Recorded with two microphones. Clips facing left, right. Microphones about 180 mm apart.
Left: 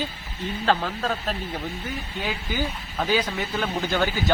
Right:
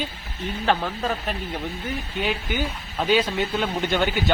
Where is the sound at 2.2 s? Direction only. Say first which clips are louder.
Right 2 dB; 20° right (ahead or behind).